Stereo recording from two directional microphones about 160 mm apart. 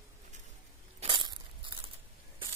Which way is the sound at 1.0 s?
30° right (ahead or behind).